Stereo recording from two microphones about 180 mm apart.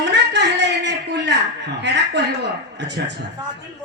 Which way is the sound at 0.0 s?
75° right (ahead or behind).